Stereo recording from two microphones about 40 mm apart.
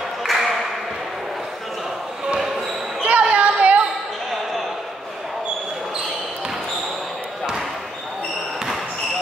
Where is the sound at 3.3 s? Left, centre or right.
Right.